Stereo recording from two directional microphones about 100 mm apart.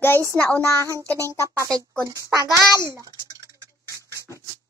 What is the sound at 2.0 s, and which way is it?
A child's voice, 35° right (ahead or behind).